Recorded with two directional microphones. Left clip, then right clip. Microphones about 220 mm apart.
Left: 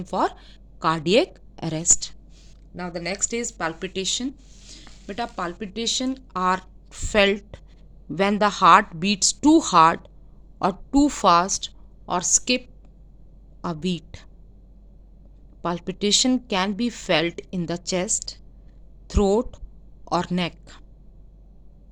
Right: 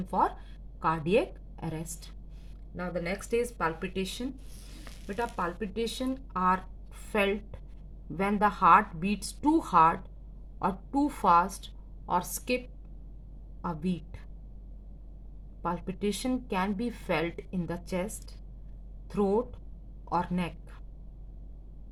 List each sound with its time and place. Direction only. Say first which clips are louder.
0.1 s a woman's voice: left 4 dB; 40° left (ahead or behind)
15.6 s a woman's voice: left 7 dB; 45° left (ahead or behind)